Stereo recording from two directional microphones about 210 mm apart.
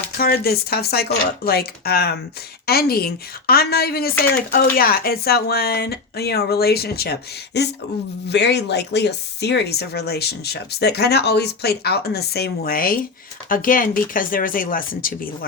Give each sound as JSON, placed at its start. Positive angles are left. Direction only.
{"t": 0.2, "sound": "speech", "side_deg": 45}